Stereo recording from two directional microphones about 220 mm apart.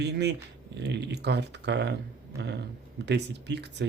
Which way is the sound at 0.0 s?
50° right (ahead or behind).